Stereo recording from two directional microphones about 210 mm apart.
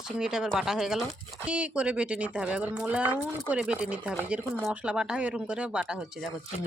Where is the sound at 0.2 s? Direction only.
5° right (ahead or behind).